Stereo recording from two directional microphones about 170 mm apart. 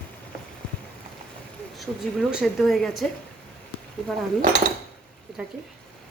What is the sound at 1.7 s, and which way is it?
A woman's voice, centre (ahead or behind).